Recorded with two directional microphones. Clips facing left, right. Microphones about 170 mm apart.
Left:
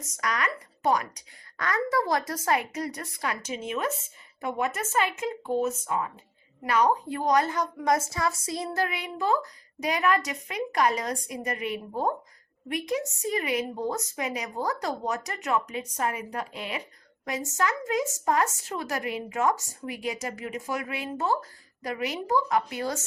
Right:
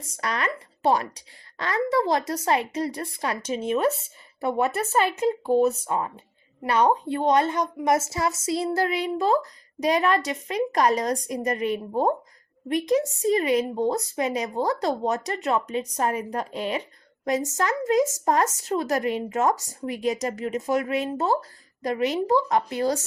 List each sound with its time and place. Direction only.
0.0 s a woman's voice: 30° right (ahead or behind)